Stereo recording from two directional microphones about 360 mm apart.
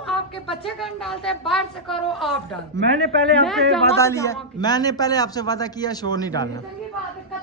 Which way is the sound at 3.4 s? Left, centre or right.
Centre.